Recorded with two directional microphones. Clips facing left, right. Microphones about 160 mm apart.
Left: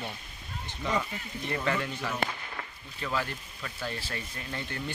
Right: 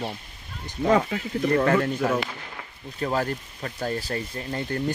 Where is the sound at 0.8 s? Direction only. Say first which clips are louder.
Right 10 dB; 55° right (ahead or behind); by 4.8 s 40° right (ahead or behind).